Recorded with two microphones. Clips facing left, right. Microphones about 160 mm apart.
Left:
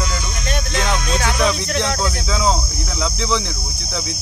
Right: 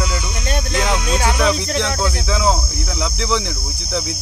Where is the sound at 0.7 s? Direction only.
10° right (ahead or behind).